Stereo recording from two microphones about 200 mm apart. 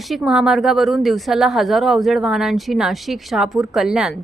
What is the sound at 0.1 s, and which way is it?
Speech, centre (ahead or behind).